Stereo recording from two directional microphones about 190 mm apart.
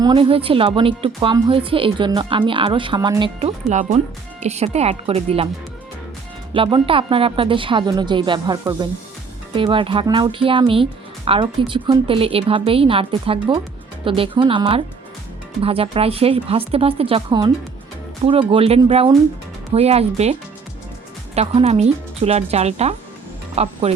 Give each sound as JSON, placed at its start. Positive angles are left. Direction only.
{"t": 0.0, "sound": "a woman's voice", "side_deg": -30}
{"t": 3.7, "sound": "speech", "side_deg": -40}
{"t": 6.5, "sound": "a woman's voice", "side_deg": -25}
{"t": 21.3, "sound": "speech", "side_deg": -35}